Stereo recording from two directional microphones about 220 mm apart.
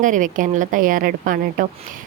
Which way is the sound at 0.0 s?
35° right (ahead or behind).